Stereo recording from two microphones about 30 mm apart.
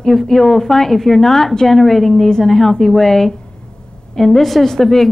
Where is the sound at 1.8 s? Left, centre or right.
Centre.